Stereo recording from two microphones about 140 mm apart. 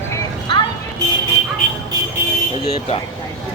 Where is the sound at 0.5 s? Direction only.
35° left (ahead or behind).